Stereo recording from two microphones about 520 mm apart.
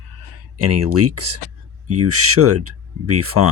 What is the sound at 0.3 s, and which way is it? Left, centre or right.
Speech, right.